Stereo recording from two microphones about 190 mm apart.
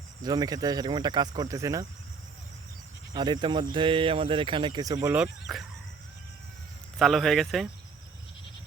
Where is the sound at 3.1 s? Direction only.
25° right (ahead or behind); by 5.7 s centre (ahead or behind).